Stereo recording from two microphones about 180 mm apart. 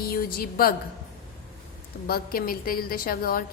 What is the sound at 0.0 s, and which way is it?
Speech, 55° left (ahead or behind).